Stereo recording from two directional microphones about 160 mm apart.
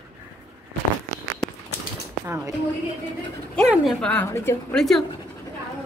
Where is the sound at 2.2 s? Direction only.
20° right (ahead or behind).